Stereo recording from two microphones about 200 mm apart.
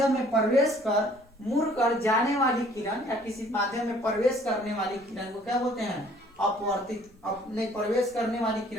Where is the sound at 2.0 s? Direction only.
15° left (ahead or behind).